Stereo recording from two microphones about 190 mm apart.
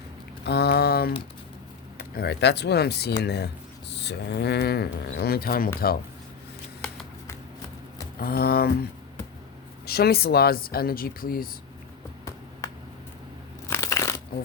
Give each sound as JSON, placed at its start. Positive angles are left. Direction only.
{"t": 0.4, "sound": "mantra", "side_deg": 60}
{"t": 2.0, "sound": "speech", "side_deg": 55}
{"t": 8.2, "sound": "speech", "side_deg": 50}
{"t": 13.7, "sound": "crunch", "side_deg": 15}